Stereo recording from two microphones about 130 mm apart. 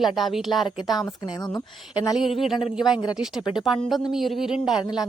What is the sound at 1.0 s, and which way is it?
A woman's voice, 30° left (ahead or behind).